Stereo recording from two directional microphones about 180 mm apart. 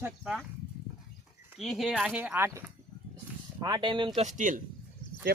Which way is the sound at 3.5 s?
25° right (ahead or behind).